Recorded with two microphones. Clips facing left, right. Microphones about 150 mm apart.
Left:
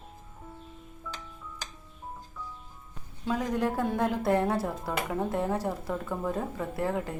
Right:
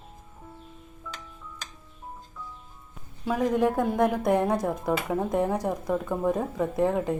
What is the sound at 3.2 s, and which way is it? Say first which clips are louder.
A woman's voice: right 5 dB; 15° right (ahead or behind).